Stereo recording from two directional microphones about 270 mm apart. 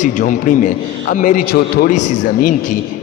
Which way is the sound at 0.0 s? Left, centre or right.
Left.